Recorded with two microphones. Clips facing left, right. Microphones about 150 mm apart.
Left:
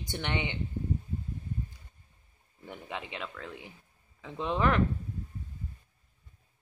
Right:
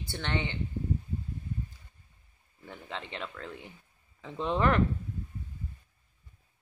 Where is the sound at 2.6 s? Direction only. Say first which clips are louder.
Left 1 dB; 15° left (ahead or behind).